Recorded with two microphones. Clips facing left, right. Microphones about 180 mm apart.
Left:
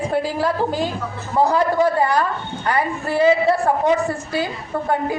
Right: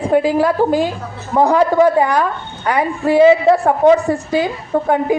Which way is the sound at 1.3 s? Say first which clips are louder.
Right 4 dB; 55° right (ahead or behind).